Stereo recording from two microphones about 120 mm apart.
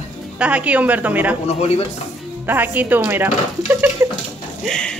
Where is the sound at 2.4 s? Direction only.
15° right (ahead or behind).